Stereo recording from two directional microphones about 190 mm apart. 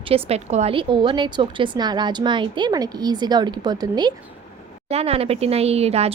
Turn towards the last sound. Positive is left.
turn(degrees=-35)  # may be behind; listen again after turning